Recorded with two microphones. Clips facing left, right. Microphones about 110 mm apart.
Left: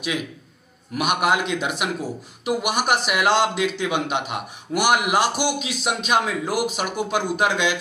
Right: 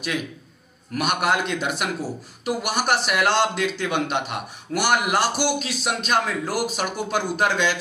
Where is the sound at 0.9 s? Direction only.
10° left (ahead or behind).